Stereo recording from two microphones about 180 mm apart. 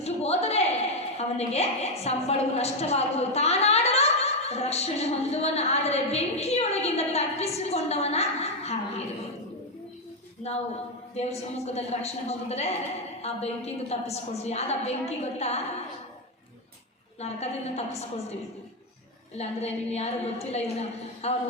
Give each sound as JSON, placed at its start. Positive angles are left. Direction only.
{"t": 0.0, "sound": "a sound", "side_deg": 35}
{"t": 1.2, "sound": "a woman's voice", "side_deg": 35}
{"t": 11.1, "sound": "a woman's voice", "side_deg": 35}
{"t": 17.2, "sound": "a woman's voice", "side_deg": 35}
{"t": 19.4, "sound": "a woman's voice", "side_deg": 35}